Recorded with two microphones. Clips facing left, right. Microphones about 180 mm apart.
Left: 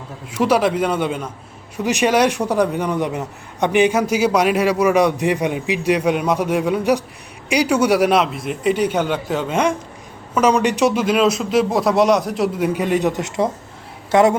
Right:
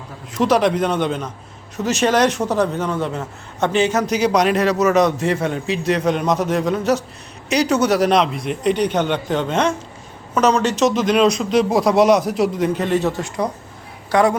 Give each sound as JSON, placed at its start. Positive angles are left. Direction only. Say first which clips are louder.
{"t": 0.3, "sound": "a woman's voice", "louder": "even", "side_deg": 10}